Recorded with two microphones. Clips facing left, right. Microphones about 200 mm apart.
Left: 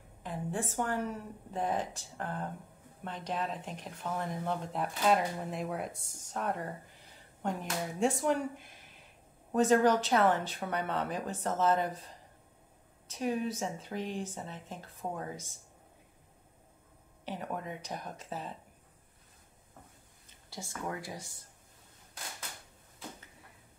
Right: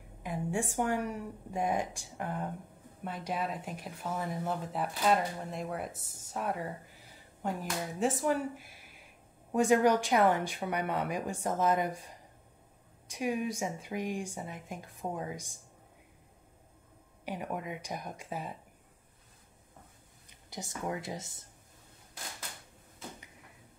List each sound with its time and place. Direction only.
0.2 s speech: 10° right (ahead or behind)
13.1 s speech: 10° right (ahead or behind)
17.2 s speech: 10° right (ahead or behind)
20.2 s speech: 20° right (ahead or behind)